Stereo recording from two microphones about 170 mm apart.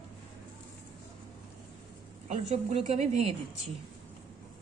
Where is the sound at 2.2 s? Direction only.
40° right (ahead or behind).